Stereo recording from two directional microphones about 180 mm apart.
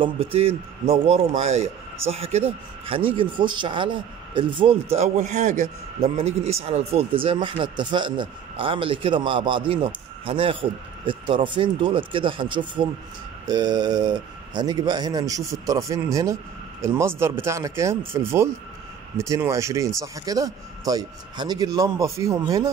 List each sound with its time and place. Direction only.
0.0 s a man's voice: 30° right (ahead or behind)